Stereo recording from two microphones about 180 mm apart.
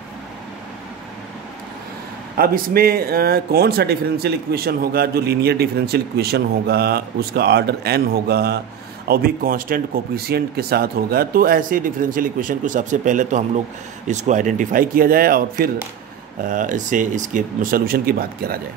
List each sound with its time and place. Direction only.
2.3 s speech: 55° right (ahead or behind)